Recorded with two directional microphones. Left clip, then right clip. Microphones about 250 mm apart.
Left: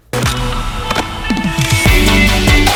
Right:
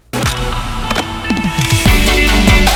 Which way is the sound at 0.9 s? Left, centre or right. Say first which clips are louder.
Even; centre.